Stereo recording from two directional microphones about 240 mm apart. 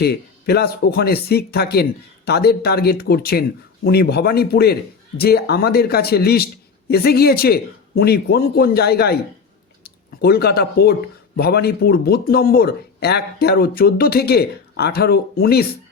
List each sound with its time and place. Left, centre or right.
0.0 s a man's voice: left